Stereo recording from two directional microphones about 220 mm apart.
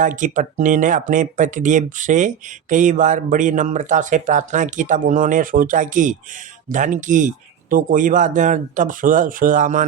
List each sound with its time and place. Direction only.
0.0 s speech: 35° right (ahead or behind)